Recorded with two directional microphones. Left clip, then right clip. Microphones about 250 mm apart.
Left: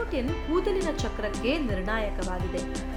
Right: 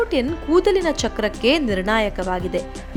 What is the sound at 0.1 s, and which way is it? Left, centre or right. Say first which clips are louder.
Speech: right 10 dB; right.